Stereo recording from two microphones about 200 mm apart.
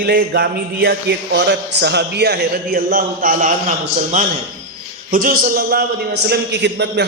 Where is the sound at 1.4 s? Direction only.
60° right (ahead or behind); by 4.3 s 40° right (ahead or behind).